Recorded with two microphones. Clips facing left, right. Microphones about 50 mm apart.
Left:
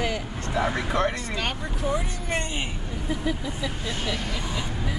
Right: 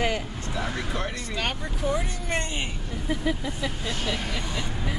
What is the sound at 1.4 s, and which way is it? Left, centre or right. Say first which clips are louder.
Speech: right 2 dB; centre.